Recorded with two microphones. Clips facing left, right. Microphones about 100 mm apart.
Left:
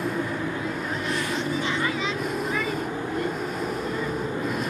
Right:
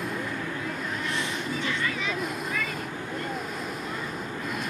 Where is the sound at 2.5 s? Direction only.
30° left (ahead or behind).